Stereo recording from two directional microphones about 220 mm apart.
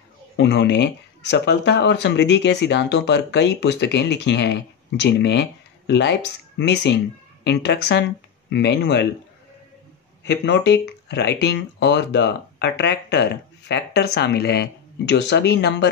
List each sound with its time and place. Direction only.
0.4 s speech: 50° left (ahead or behind)
10.2 s speech: 50° left (ahead or behind)